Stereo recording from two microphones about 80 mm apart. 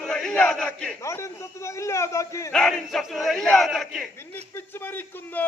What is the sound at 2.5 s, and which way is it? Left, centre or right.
A man's voice, centre.